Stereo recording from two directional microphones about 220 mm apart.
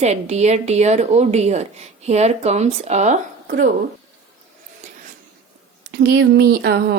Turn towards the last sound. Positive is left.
turn(degrees=-50)  # may be behind; listen again after turning